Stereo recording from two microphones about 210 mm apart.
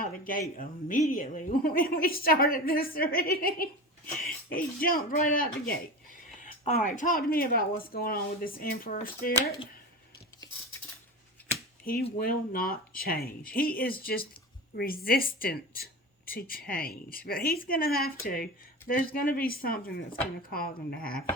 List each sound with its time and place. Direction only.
0.0 s a woman's voice: 40° left (ahead or behind)
12.2 s a woman's voice: 45° left (ahead or behind)